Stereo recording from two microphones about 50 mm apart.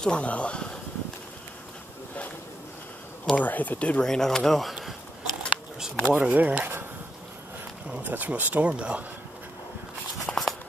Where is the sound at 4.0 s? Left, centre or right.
Centre.